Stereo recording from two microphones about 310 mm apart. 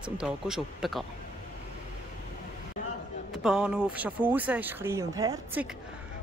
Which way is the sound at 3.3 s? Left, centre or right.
Centre.